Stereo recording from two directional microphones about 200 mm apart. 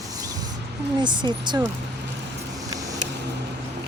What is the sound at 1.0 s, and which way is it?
Speech, 20° right (ahead or behind).